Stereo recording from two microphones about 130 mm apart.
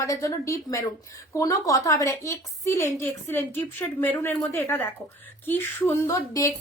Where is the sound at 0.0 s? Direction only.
25° left (ahead or behind).